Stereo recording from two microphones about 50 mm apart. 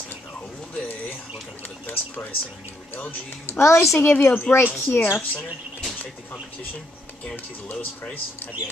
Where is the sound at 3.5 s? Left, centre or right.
Left.